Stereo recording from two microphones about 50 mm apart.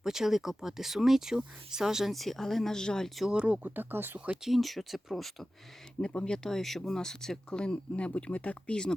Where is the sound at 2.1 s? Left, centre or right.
Centre.